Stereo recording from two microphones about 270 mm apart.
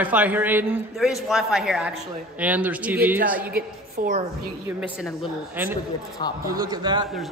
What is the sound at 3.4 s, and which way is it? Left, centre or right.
A woman's voice, right.